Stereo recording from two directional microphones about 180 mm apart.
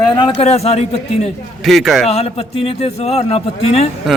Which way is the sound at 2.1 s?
35° left (ahead or behind).